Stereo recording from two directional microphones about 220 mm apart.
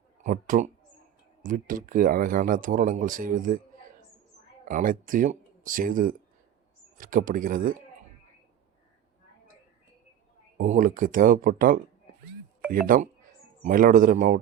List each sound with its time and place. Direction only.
0.2 s speech: 35° right (ahead or behind)
4.7 s speech: 40° right (ahead or behind)
10.6 s speech: 40° right (ahead or behind)